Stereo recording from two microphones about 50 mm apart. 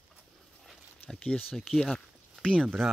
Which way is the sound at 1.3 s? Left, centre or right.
Centre.